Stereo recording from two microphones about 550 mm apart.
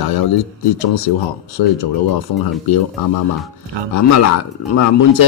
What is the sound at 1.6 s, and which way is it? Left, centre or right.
Speech, left.